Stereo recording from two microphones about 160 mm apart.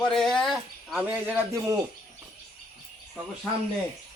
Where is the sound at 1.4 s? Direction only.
20° right (ahead or behind).